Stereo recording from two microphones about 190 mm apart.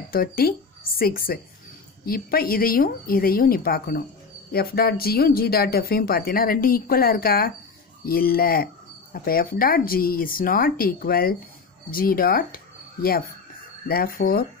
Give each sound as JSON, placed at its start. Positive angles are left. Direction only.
{"t": 0.1, "sound": "speech", "side_deg": 50}